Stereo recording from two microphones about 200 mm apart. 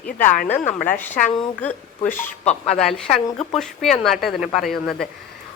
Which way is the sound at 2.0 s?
35° left (ahead or behind).